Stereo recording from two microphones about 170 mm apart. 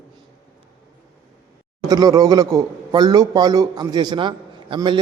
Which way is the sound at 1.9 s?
20° right (ahead or behind).